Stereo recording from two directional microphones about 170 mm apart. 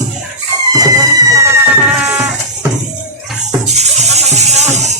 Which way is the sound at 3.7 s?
40° right (ahead or behind).